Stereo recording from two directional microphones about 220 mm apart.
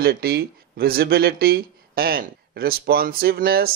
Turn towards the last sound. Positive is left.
turn(degrees=-40)  # may be behind; listen again after turning